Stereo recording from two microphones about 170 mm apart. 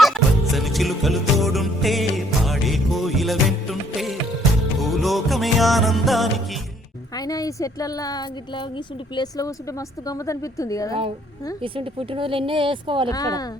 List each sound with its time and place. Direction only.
0.0 s music: centre (ahead or behind)
7.2 s a woman's voice: 20° left (ahead or behind)
11.6 s speech: 30° right (ahead or behind)
13.1 s a woman's voice: 20° left (ahead or behind)